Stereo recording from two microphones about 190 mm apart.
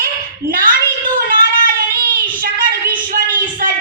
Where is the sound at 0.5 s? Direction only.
50° right (ahead or behind).